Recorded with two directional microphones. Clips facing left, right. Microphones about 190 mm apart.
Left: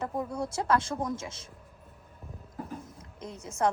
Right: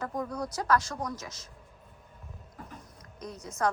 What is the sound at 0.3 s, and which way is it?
A woman's voice, 25° left (ahead or behind).